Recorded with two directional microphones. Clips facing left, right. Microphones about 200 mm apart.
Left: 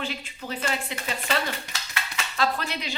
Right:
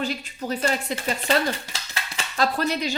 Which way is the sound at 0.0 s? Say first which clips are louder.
Right 5 dB; 40° right (ahead or behind).